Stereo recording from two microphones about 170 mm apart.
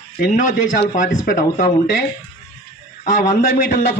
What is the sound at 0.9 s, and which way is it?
Speech, 50° left (ahead or behind).